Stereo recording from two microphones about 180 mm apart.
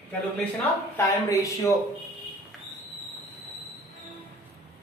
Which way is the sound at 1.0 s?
15° left (ahead or behind).